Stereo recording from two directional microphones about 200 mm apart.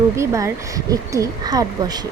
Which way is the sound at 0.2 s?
15° right (ahead or behind).